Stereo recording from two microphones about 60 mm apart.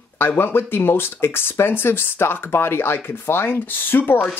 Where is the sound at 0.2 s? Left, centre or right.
Left.